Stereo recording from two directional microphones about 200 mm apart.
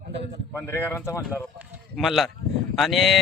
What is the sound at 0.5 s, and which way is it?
Speech, 10° left (ahead or behind).